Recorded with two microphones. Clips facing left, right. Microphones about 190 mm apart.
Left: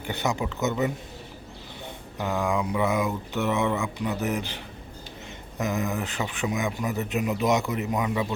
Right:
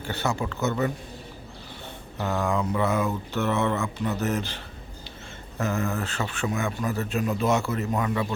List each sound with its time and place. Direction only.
0.0 s a man's voice: 15° left (ahead or behind)
2.1 s a man's voice: 15° left (ahead or behind)